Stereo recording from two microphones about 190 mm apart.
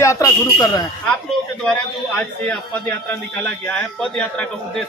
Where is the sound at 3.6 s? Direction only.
5° left (ahead or behind).